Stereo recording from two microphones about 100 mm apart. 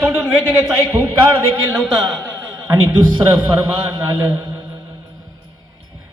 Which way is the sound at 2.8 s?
20° right (ahead or behind).